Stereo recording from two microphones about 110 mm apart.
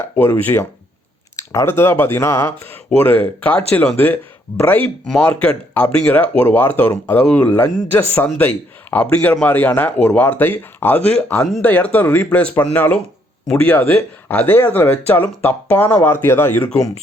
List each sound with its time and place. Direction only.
0.0 s speech: 20° left (ahead or behind)
3.0 s speech: 15° left (ahead or behind)